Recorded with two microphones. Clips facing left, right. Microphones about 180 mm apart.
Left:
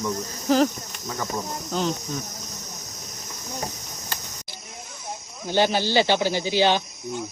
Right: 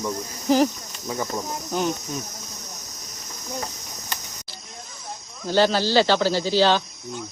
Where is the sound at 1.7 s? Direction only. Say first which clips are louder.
Right 1 dB; 15° right (ahead or behind).